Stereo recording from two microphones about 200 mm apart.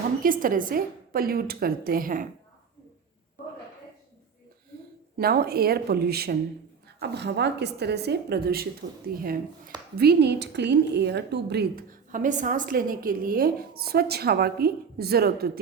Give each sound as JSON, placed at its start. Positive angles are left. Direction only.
{"t": 0.2, "sound": "a woman's voice", "side_deg": -45}
{"t": 5.1, "sound": "a woman's voice", "side_deg": -50}